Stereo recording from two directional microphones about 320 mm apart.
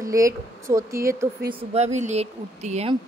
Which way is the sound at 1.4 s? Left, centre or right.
Right.